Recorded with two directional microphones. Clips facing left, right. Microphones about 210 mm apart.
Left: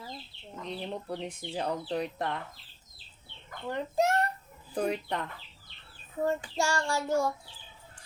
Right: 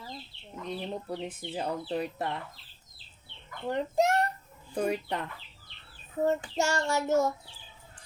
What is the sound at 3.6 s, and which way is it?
Speech, 15° right (ahead or behind).